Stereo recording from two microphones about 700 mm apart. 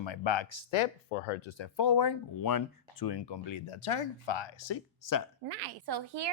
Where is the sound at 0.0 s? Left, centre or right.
Left.